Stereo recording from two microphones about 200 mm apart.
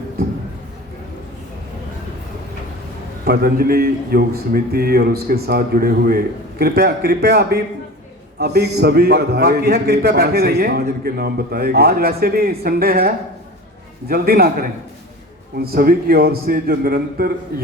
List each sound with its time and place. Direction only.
3.2 s a man's voice: 50° right (ahead or behind)